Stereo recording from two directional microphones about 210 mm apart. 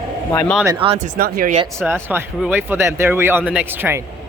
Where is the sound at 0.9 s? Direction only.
35° right (ahead or behind).